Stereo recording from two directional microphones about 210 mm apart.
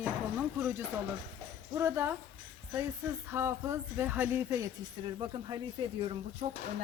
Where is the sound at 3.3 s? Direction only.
10° right (ahead or behind).